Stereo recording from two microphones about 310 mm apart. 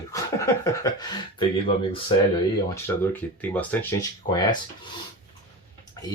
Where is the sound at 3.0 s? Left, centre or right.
Centre.